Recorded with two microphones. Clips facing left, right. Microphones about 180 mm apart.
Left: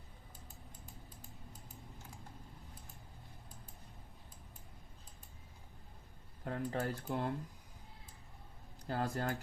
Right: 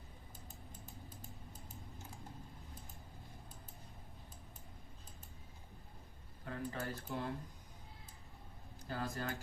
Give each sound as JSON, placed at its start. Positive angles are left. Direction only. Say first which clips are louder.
{"t": 6.4, "sound": "speech", "louder": "left 5 dB", "side_deg": 55}
{"t": 8.9, "sound": "speech", "louder": "left 4 dB", "side_deg": 60}